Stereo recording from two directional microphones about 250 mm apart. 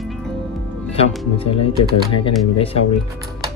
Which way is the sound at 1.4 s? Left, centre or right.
Left.